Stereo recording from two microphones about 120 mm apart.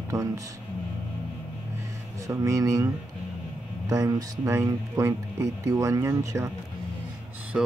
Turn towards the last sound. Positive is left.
turn(degrees=-5)  # may be behind; listen again after turning